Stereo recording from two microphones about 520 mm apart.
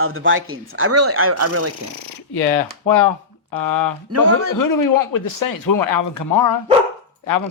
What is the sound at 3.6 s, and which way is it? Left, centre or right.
A man's voice, left.